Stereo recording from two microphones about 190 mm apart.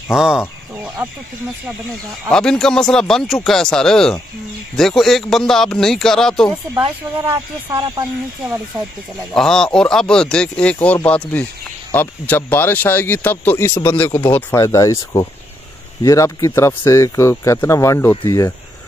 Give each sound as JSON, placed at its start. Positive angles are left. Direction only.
{"t": 0.1, "sound": "speech", "side_deg": -5}
{"t": 7.2, "sound": "speech", "side_deg": -15}
{"t": 9.3, "sound": "speech", "side_deg": 0}